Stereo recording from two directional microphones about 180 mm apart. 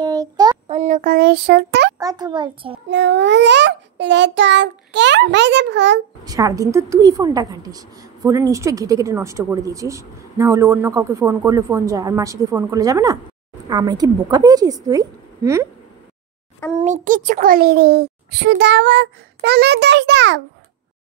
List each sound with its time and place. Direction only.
0.0 s child singing: 20° right (ahead or behind)
0.7 s speech: 40° right (ahead or behind); by 2.0 s 70° right (ahead or behind)
2.0 s a woman's voice: 20° right (ahead or behind)
2.9 s a child's voice: 80° right
6.2 s a woman's voice: 20° right (ahead or behind)
16.8 s a child's voice: 45° right (ahead or behind); by 20.4 s 75° right (ahead or behind)